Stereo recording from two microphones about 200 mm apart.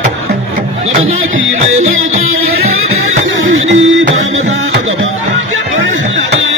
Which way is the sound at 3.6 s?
75° right (ahead or behind).